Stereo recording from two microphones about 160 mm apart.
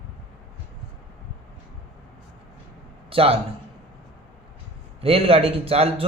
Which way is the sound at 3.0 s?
35° right (ahead or behind).